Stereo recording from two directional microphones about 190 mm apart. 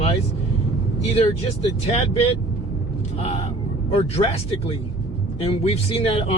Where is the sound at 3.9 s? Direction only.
30° left (ahead or behind).